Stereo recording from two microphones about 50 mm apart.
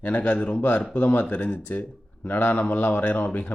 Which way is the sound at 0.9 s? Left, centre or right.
Left.